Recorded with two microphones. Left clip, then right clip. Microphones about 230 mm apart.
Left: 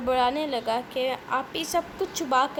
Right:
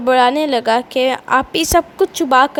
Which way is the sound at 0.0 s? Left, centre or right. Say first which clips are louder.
Right 11 dB; right.